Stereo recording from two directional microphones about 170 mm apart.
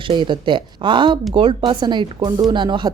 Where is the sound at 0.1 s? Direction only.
30° right (ahead or behind).